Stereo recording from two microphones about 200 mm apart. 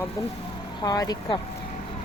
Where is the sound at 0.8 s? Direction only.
20° left (ahead or behind).